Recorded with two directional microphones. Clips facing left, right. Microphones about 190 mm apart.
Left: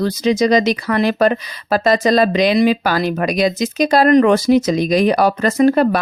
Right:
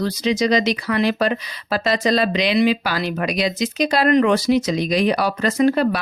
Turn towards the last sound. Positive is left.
turn(degrees=50)  # may be behind; listen again after turning